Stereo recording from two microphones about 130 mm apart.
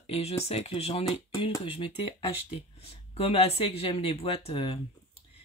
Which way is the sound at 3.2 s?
50° left (ahead or behind).